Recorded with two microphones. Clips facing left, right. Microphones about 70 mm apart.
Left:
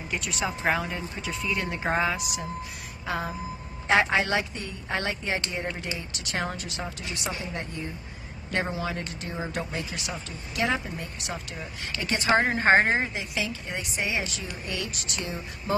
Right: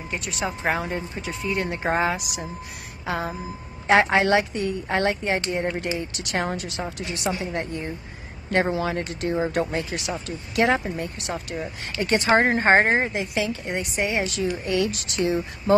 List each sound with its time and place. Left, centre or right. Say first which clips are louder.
0.4 s speech: right 1 dB; centre
0.7 s speech: right 3 dB; right
1.2 s a woman's voice: right 2 dB; right
1.7 s speech: right 3 dB; centre
2.1 s speech: even; right
3.8 s a woman's voice: right 5 dB; right
6.6 s a woman's voice: right 4 dB; right
8.7 s a woman's voice: right 6 dB; right
13.1 s speech: right 6 dB; right